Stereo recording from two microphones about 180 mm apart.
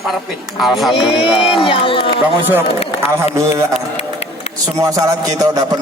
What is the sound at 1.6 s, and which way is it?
Speech, 30° left (ahead or behind).